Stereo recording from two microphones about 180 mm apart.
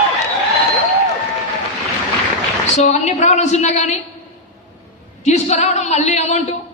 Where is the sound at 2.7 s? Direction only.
40° left (ahead or behind).